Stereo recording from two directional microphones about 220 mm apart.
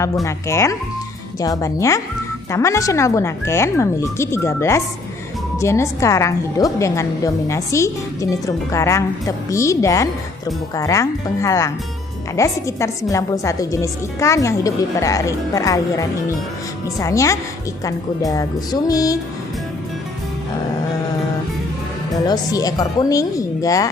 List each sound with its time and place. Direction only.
0.3 s a woman's voice: 15° left (ahead or behind)
22.3 s a woman's voice: 15° left (ahead or behind)